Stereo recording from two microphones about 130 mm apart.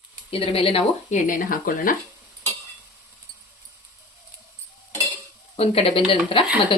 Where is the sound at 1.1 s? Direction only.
90° left.